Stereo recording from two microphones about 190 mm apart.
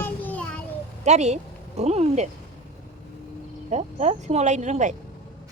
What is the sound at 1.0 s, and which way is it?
A woman's voice, 35° right (ahead or behind).